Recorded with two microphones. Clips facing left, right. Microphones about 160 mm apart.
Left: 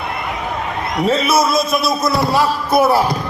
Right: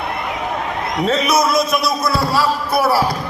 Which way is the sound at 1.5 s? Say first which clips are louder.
Even; 25° left (ahead or behind).